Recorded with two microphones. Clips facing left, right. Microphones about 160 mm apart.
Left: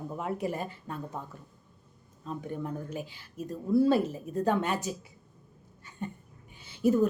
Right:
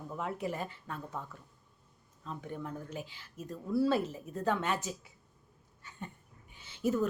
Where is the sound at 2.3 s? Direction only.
45° left (ahead or behind).